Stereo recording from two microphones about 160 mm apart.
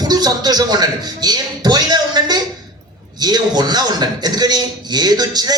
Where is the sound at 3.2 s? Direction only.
25° right (ahead or behind).